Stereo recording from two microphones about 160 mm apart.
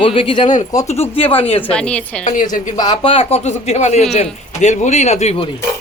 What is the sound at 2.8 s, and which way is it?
Speech, 30° left (ahead or behind).